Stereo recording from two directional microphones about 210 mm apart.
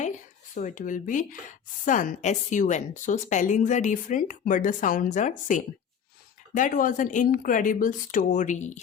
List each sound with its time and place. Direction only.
0.5 s speech: 35° left (ahead or behind)